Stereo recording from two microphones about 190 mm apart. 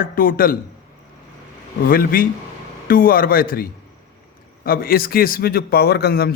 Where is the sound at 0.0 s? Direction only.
50° left (ahead or behind).